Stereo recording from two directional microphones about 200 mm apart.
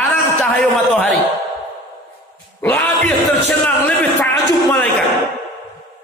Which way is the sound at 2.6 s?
10° left (ahead or behind).